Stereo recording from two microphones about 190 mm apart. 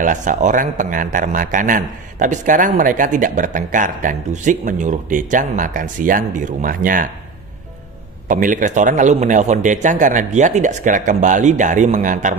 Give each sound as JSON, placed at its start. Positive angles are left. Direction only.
{"t": 0.0, "sound": "a man's voice", "side_deg": -40}
{"t": 8.3, "sound": "a man's voice", "side_deg": -45}